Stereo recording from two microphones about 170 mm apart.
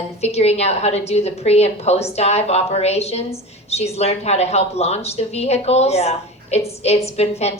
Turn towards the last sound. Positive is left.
turn(degrees=40)  # may be behind; listen again after turning